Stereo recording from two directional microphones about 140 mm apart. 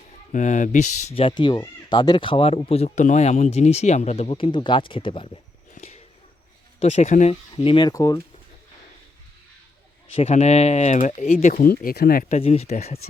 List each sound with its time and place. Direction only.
0.3 s speech: 60° left (ahead or behind)
1.1 s speech: 35° left (ahead or behind)
6.7 s speech: 55° left (ahead or behind)
7.5 s speech: 40° left (ahead or behind)
10.2 s speech: 50° left (ahead or behind); by 12.2 s 90° left
12.3 s speech: 50° left (ahead or behind)